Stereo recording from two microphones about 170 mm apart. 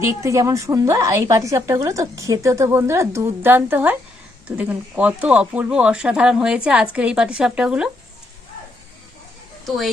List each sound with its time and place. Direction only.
0.0 s a woman's voice: 15° right (ahead or behind)
9.6 s a woman's voice: centre (ahead or behind)